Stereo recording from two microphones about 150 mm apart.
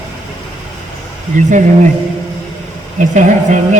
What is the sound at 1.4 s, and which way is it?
Speech, 55° right (ahead or behind).